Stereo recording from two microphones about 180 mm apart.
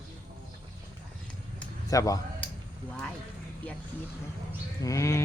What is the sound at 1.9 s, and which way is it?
Speech, 20° left (ahead or behind).